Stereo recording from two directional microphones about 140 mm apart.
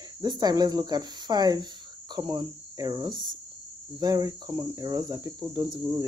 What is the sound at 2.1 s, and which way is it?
Speech, 30° right (ahead or behind).